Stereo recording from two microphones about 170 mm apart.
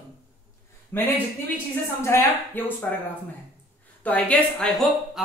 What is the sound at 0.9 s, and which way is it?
A woman's voice, 10° left (ahead or behind).